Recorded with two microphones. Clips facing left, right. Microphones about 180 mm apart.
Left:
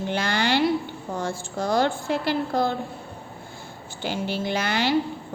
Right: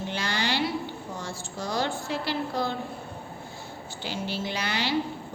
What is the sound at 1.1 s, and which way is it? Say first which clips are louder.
A woman's voice: left 7 dB; 50° left (ahead or behind).